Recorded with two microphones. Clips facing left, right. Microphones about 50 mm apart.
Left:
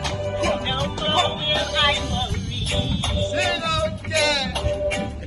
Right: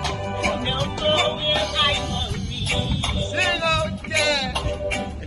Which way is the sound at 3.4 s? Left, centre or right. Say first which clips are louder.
Right 3 dB; right.